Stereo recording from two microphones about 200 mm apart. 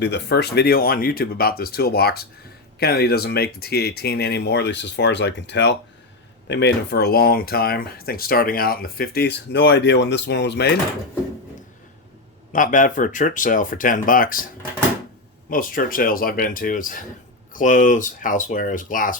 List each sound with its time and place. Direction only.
0.0 s speech: 55° left (ahead or behind)
12.5 s speech: 40° left (ahead or behind)
15.4 s speech: 45° left (ahead or behind)